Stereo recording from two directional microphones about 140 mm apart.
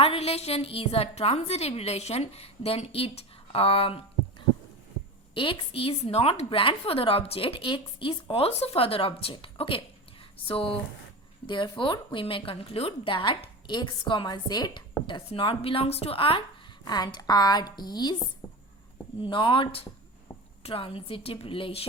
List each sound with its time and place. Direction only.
0.0 s a woman's voice: 45° left (ahead or behind)
16.8 s a woman's voice: 30° left (ahead or behind)